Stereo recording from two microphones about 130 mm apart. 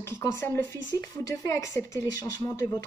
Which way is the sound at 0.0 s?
20° left (ahead or behind).